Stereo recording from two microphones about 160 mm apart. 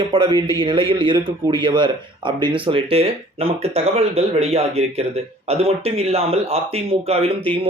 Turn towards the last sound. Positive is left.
turn(degrees=-40)  # may be behind; listen again after turning